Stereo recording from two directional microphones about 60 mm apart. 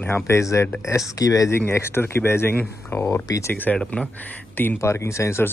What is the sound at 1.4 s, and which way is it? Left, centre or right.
Speech, left.